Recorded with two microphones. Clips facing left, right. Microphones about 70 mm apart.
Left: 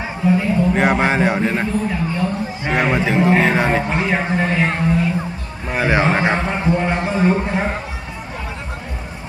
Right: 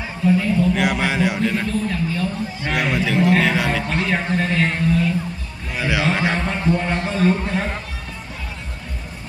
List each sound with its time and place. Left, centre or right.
0.3 s a man's voice: left
0.8 s a man's voice: left
2.2 s a man's voice: left
3.8 s a man's voice: centre
5.7 s a man's voice: left